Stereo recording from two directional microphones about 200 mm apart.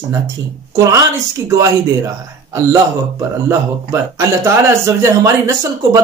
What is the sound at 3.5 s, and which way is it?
A man's voice, 15° right (ahead or behind).